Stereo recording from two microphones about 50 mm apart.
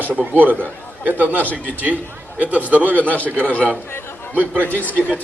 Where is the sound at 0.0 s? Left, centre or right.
Right.